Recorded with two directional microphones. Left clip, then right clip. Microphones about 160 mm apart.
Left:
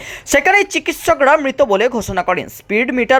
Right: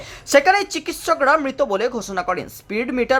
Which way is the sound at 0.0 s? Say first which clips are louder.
Left 1 dB; 20° left (ahead or behind).